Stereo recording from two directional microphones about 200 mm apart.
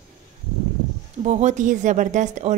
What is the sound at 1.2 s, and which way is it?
Speech, 35° right (ahead or behind).